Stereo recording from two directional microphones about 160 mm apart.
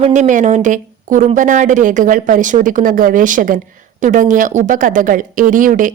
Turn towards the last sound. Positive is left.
turn(degrees=-55)  # may be behind; listen again after turning